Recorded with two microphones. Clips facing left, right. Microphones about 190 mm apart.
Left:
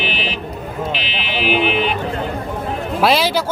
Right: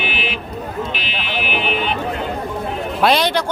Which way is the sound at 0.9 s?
50° right (ahead or behind).